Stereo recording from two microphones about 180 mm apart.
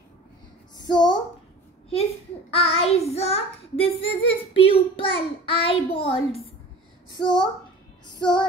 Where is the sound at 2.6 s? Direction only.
35° left (ahead or behind).